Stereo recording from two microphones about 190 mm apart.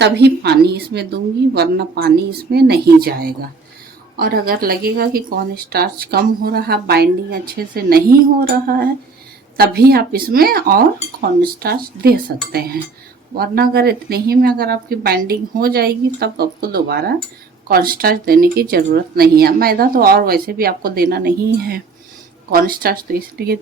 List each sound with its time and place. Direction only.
0.0 s speech: 60° right (ahead or behind)